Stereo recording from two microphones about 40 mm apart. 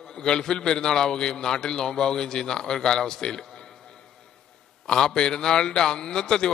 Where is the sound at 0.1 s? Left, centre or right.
Centre.